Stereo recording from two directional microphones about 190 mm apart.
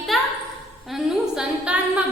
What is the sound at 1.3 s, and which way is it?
Speech, 5° right (ahead or behind).